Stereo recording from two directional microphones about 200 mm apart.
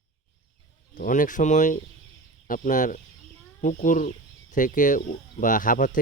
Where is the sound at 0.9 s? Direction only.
45° left (ahead or behind).